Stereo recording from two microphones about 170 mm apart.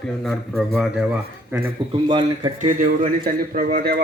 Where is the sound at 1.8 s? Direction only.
30° right (ahead or behind).